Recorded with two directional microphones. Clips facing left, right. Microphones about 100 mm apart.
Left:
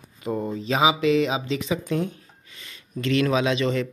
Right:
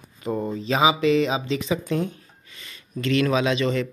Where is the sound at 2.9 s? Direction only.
15° left (ahead or behind).